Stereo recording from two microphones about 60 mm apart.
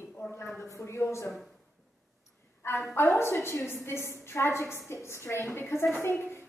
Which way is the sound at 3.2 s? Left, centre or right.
Left.